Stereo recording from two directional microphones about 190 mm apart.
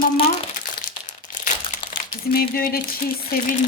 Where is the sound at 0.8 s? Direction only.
40° left (ahead or behind).